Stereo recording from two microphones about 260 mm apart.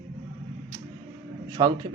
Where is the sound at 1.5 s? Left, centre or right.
Centre.